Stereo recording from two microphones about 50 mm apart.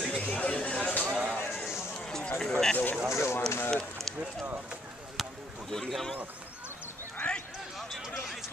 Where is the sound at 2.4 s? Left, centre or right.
Centre.